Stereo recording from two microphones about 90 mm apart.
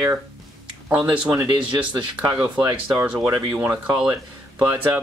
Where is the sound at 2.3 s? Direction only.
15° right (ahead or behind).